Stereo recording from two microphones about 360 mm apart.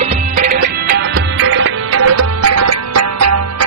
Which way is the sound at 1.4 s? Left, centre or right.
Right.